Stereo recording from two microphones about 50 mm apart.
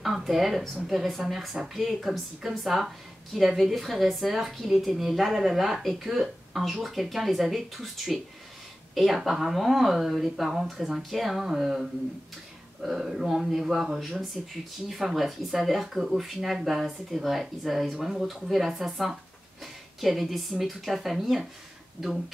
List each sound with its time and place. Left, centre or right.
0.0 s a woman's voice: centre